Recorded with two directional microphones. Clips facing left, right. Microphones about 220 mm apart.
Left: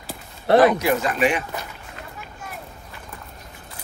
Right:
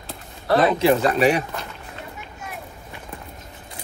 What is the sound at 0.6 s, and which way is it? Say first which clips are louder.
Speech: even; 30° right (ahead or behind).